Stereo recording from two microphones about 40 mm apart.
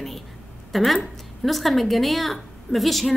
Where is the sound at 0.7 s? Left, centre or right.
Centre.